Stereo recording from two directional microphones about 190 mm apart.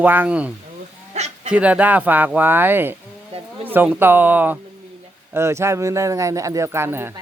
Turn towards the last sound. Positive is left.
turn(degrees=-10)  # may be behind; listen again after turning